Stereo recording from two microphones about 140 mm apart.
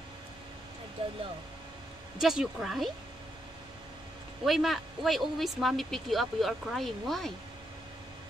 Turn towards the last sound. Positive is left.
turn(degrees=0)  # may be behind; listen again after turning